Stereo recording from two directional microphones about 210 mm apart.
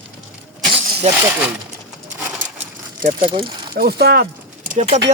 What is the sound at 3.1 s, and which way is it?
Speech, 25° right (ahead or behind).